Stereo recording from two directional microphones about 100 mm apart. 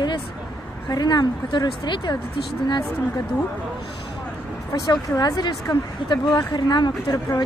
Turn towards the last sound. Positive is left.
turn(degrees=45)  # may be behind; listen again after turning